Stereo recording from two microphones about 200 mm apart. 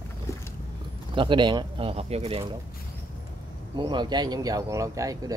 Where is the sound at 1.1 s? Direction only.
25° right (ahead or behind).